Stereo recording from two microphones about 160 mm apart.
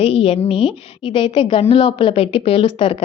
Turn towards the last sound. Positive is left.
turn(degrees=35)  # may be behind; listen again after turning